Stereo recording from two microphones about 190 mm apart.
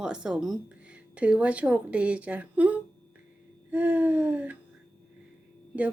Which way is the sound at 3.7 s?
10° right (ahead or behind).